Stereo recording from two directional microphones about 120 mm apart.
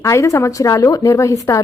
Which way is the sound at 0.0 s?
25° left (ahead or behind).